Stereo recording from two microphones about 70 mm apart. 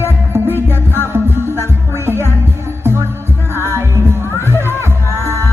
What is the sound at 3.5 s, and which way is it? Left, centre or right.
Music, right.